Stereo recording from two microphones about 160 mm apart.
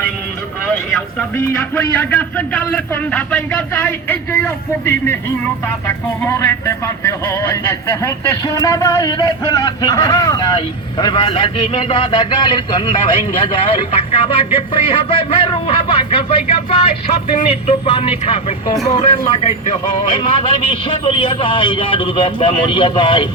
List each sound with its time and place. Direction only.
0.7 s vehicle: 5° left (ahead or behind)
1.5 s a man's voice: 10° left (ahead or behind)
6.2 s a man's voice: 15° left (ahead or behind); by 23.3 s 30° left (ahead or behind)